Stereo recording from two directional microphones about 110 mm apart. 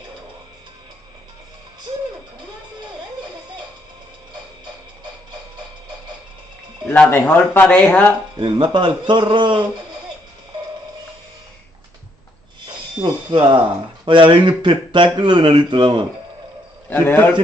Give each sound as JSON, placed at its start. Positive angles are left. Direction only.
{"t": 6.9, "sound": "speech", "side_deg": 15}
{"t": 8.4, "sound": "a man's voice", "side_deg": -50}
{"t": 13.0, "sound": "a man's voice", "side_deg": -40}
{"t": 16.9, "sound": "a man's voice", "side_deg": 20}